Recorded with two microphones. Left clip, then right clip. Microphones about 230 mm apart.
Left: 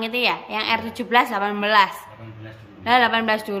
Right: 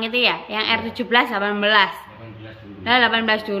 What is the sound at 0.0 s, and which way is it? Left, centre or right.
Speech, centre.